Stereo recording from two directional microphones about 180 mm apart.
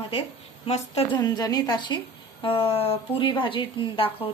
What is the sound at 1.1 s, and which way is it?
A woman's voice, 25° left (ahead or behind).